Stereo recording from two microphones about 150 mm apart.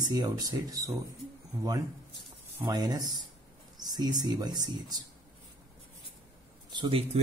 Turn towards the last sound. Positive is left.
turn(degrees=-30)  # may be behind; listen again after turning